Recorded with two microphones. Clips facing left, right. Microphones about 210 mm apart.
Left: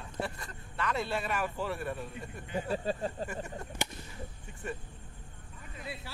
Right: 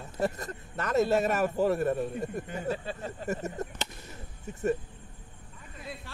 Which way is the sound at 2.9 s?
35° left (ahead or behind).